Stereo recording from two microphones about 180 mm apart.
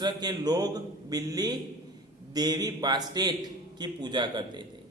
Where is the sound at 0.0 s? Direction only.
25° right (ahead or behind).